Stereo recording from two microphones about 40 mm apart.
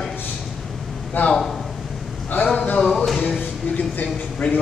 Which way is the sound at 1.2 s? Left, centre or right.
Left.